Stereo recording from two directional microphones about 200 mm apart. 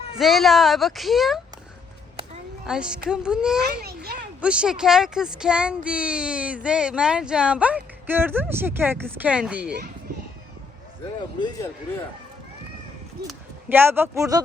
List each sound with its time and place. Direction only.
0.2 s speech: centre (ahead or behind)
2.6 s speech: 5° right (ahead or behind)
11.3 s speech: 20° left (ahead or behind)
13.2 s speech: 10° right (ahead or behind)